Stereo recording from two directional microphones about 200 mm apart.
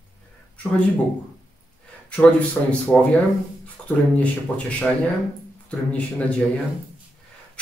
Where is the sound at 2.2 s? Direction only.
5° left (ahead or behind).